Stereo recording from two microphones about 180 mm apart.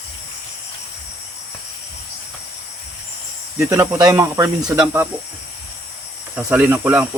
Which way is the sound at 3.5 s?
15° right (ahead or behind).